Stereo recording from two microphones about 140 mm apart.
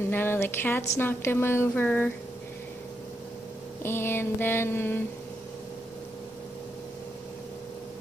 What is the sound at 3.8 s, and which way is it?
A woman's voice, 15° left (ahead or behind).